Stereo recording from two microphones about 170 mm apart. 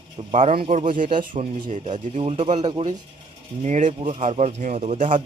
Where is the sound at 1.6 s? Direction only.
45° right (ahead or behind).